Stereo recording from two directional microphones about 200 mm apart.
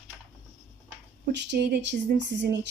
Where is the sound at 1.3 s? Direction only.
60° right (ahead or behind).